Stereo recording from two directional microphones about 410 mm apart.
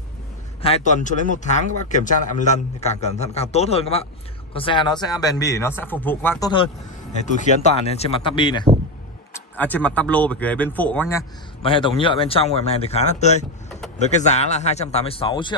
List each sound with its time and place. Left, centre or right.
0.6 s speech: centre